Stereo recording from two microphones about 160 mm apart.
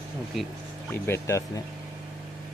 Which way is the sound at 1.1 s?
20° left (ahead or behind).